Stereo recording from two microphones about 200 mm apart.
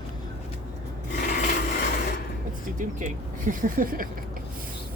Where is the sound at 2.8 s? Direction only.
40° right (ahead or behind).